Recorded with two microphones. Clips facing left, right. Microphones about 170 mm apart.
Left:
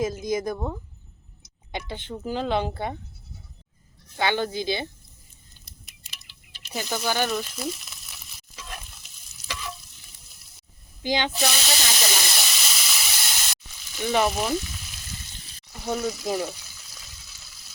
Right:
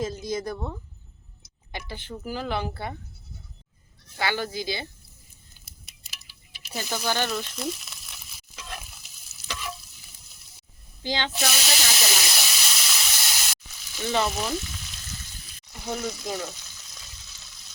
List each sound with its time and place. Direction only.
0.0 s speech: 10° left (ahead or behind)
1.9 s speech: 20° left (ahead or behind)
4.2 s speech: 20° left (ahead or behind)
5.6 s a sound: 5° right (ahead or behind)
6.8 s speech: centre (ahead or behind)
7.3 s frying: centre (ahead or behind)
11.0 s speech: 15° left (ahead or behind)
11.3 s hiss: centre (ahead or behind)
14.1 s speech: 10° left (ahead or behind)
15.7 s frying: centre (ahead or behind)